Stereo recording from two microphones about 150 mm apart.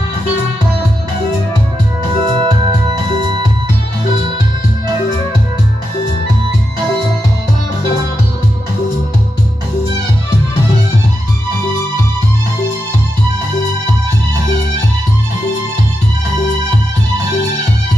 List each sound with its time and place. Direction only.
2.2 s music: 30° right (ahead or behind)